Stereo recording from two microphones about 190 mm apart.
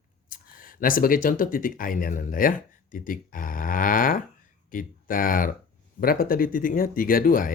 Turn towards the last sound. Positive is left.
turn(degrees=45)  # may be behind; listen again after turning